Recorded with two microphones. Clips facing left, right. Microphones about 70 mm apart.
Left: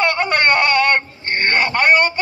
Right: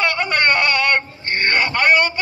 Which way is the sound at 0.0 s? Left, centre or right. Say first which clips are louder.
Left 2 dB; left.